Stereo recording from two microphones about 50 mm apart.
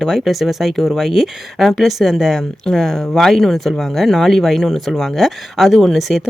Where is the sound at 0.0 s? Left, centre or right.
Centre.